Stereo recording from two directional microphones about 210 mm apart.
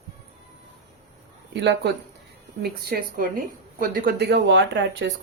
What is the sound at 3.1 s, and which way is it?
A woman's voice, 40° right (ahead or behind).